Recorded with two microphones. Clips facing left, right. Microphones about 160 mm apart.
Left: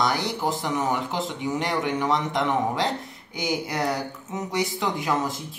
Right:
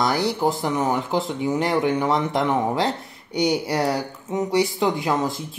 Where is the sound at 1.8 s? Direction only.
30° right (ahead or behind).